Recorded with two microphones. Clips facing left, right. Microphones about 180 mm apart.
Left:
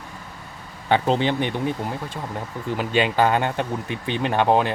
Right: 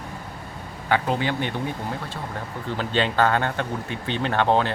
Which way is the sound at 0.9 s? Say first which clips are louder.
Left 3 dB; 25° left (ahead or behind).